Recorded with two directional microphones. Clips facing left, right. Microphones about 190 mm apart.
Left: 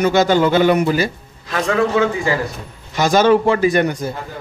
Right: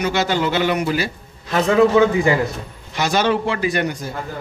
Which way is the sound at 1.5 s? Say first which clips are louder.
Right 3 dB; 20° right (ahead or behind).